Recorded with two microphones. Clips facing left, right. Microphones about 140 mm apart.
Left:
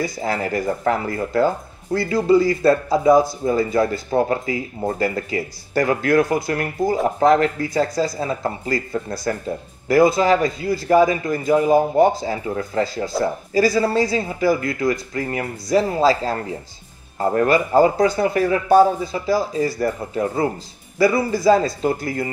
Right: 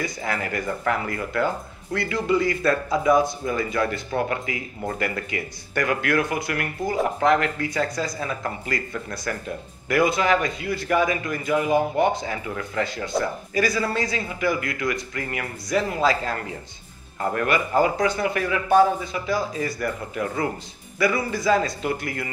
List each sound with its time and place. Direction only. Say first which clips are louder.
0.0 s speech: left 5 dB; 30° left (ahead or behind)